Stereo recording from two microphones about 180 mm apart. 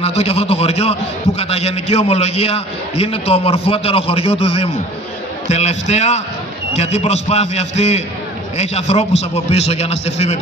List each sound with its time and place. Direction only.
0.0 s a man's voice: 35° left (ahead or behind)